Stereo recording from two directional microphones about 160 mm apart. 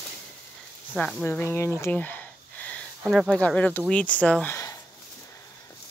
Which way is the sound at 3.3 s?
10° left (ahead or behind).